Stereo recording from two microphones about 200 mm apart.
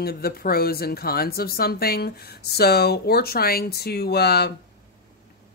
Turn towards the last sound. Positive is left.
turn(degrees=55)  # may be behind; listen again after turning